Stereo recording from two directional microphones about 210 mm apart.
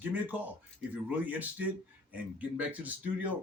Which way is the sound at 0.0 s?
10° right (ahead or behind).